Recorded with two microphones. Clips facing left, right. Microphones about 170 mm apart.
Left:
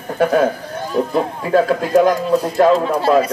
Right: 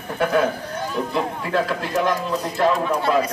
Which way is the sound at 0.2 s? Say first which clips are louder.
Left 5 dB; 45° left (ahead or behind).